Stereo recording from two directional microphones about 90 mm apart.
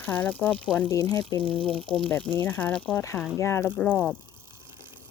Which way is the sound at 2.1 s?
20° left (ahead or behind).